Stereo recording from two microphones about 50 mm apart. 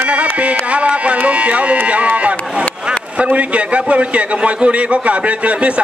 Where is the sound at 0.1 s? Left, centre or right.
Right.